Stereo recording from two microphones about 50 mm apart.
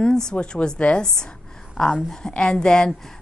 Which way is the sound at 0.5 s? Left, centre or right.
Left.